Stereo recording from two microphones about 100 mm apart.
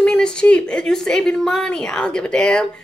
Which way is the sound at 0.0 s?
10° left (ahead or behind).